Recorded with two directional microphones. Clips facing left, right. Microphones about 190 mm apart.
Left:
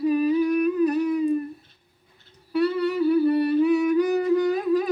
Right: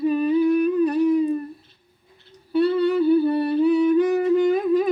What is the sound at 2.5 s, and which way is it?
Humming, 25° right (ahead or behind).